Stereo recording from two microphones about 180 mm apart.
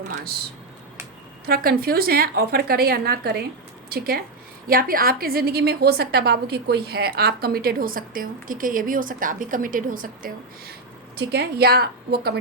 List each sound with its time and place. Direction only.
1.5 s a woman's voice: 55° right (ahead or behind)
11.3 s a woman's voice: 60° right (ahead or behind)